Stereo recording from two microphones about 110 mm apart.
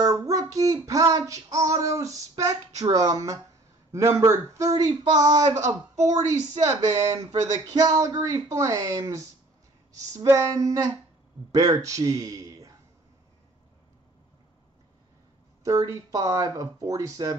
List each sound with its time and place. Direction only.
0.0 s female singing: 35° right (ahead or behind)
2.4 s a man's voice: 30° right (ahead or behind)
7.1 s a man's voice: 35° right (ahead or behind)
15.6 s a man's voice: 30° right (ahead or behind)